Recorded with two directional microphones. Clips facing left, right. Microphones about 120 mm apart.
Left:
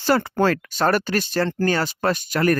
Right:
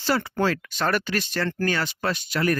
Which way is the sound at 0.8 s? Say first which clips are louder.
Left 5 dB; 40° left (ahead or behind).